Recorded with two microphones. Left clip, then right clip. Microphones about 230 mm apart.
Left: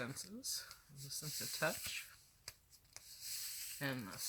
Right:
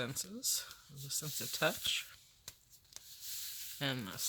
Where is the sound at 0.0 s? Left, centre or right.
Right.